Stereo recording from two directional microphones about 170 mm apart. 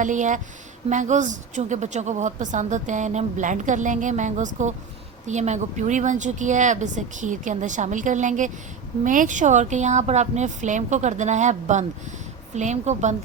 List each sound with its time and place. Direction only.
0.0 s a woman's voice: 45° right (ahead or behind)